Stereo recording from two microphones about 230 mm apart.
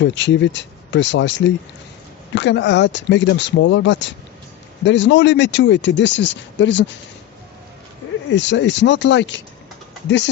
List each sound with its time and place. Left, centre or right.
0.0 s speech: left
8.3 s speech: left